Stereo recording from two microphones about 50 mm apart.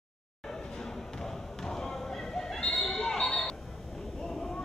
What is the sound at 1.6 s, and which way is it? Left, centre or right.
Basketball bounce, centre.